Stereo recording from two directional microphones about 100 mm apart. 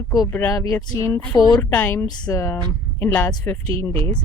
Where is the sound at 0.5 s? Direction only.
35° left (ahead or behind).